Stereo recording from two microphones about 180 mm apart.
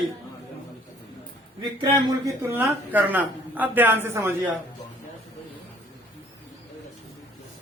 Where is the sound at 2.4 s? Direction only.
15° right (ahead or behind).